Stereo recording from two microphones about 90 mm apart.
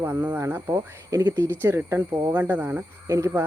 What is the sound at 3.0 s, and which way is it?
Speech, 35° right (ahead or behind).